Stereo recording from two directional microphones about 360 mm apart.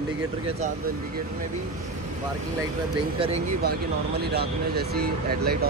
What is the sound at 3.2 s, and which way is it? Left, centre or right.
Speech, centre.